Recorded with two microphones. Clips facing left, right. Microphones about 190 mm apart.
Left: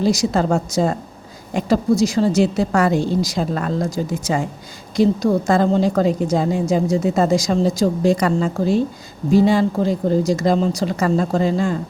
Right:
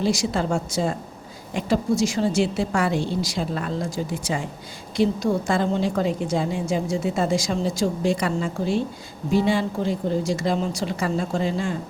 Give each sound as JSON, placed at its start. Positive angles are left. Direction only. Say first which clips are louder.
{"t": 0.0, "sound": "a woman's voice", "louder": "left 5 dB", "side_deg": 40}